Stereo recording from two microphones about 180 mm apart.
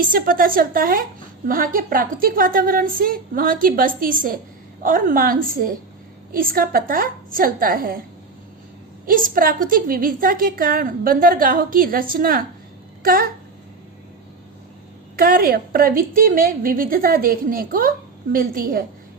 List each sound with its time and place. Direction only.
0.0 s a woman's voice: 50° right (ahead or behind)
9.0 s a woman's voice: 50° right (ahead or behind)
15.1 s a woman's voice: 55° right (ahead or behind)